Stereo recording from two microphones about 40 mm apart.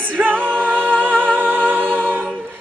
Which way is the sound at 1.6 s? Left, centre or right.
Right.